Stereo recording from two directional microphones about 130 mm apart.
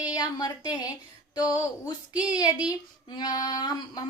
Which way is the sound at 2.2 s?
30° left (ahead or behind).